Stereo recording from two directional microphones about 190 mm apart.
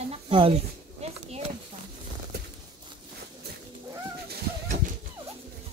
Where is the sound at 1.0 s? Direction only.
35° right (ahead or behind).